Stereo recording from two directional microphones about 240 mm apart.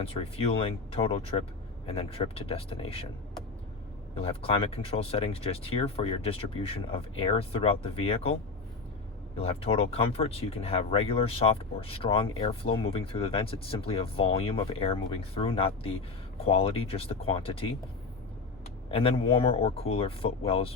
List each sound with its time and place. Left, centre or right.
0.0 s speech: left
4.1 s speech: left
9.4 s speech: left
18.9 s speech: left